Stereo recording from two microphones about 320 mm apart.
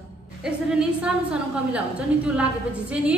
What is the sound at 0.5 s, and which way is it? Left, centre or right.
A woman's voice, centre.